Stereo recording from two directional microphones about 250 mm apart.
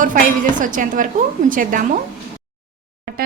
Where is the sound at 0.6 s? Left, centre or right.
Right.